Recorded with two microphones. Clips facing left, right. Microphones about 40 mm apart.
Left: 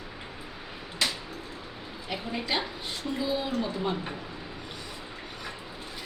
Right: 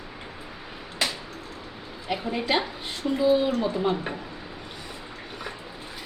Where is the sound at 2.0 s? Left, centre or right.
Centre.